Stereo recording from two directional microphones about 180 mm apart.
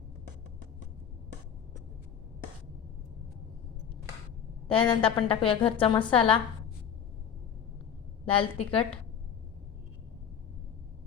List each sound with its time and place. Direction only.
4.7 s a woman's voice: 30° left (ahead or behind)
8.2 s a woman's voice: 30° left (ahead or behind)